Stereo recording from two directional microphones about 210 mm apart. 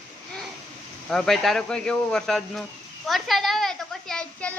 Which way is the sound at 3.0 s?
Centre (ahead or behind).